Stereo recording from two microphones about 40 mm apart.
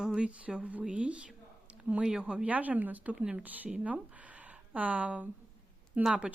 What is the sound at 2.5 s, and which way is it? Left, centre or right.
Speech, right.